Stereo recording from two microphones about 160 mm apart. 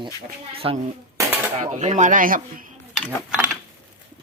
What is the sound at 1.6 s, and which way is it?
Speech, 50° right (ahead or behind).